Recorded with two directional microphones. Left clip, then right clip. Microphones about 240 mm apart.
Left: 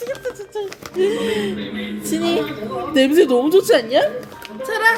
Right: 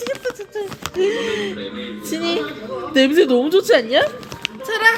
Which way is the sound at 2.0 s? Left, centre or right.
Centre.